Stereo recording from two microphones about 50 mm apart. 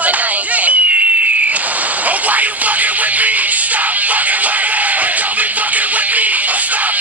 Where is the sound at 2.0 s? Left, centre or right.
Right.